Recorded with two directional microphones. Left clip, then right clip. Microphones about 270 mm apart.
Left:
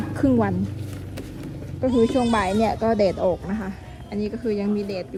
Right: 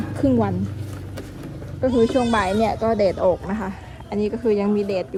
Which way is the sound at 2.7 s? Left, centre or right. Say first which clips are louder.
Right 1 dB; centre.